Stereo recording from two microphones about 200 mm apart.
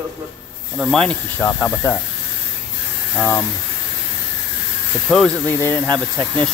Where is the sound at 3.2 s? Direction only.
10° left (ahead or behind).